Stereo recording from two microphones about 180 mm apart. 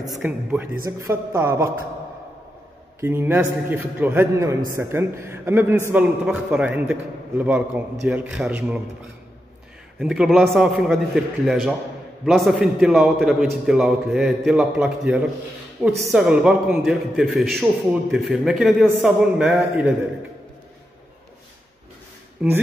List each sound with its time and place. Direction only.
0.1 s a man's voice: 5° right (ahead or behind)
3.0 s a man's voice: 10° right (ahead or behind)
9.9 s a man's voice: 5° right (ahead or behind)
16.1 s a man's voice: 5° right (ahead or behind)
22.4 s a man's voice: 5° right (ahead or behind)